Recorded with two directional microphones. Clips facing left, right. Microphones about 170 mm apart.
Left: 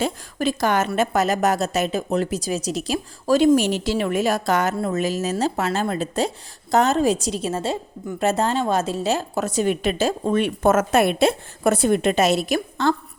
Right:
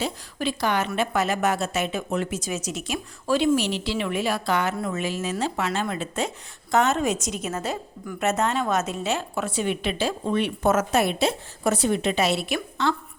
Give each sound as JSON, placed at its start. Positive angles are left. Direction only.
{"t": 0.0, "sound": "speech", "side_deg": 45}